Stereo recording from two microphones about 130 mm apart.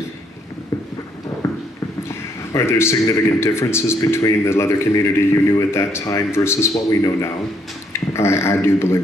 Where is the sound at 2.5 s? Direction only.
20° left (ahead or behind).